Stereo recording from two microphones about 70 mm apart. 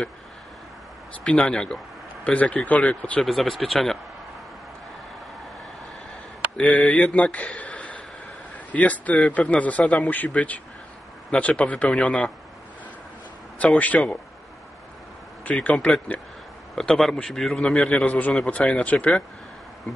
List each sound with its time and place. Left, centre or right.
1.2 s a man's voice: centre
3.2 s speech: centre
6.5 s a man's voice: centre
7.2 s a sound: centre
8.7 s a man's voice: left
13.6 s speech: left
15.4 s speech: centre
16.7 s a man's voice: centre